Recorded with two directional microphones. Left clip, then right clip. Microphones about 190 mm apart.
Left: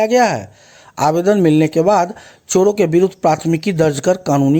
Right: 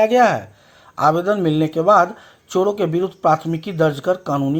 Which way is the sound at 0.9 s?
55° left (ahead or behind).